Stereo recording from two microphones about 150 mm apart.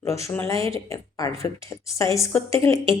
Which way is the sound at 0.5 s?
40° right (ahead or behind).